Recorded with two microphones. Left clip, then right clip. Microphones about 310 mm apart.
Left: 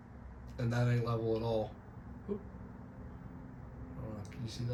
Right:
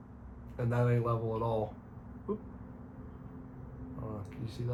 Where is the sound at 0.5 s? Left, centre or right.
Centre.